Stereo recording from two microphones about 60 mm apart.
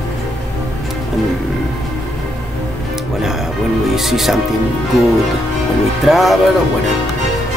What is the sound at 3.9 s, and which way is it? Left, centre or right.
Speech, centre.